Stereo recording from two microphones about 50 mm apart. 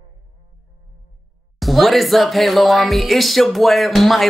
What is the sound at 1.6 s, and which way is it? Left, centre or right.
Speech, centre.